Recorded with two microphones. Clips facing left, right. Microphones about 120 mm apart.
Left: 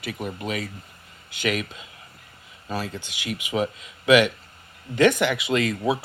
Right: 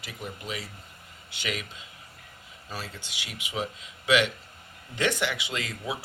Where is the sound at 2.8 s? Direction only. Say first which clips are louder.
Left 9 dB; 50° left (ahead or behind).